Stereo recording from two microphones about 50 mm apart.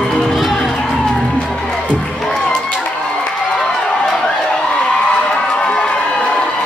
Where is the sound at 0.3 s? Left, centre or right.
Centre.